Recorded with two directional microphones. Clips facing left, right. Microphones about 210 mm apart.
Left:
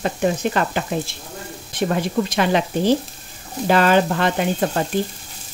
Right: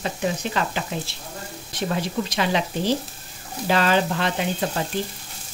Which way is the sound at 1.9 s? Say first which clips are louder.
Left 4 dB; 55° left (ahead or behind).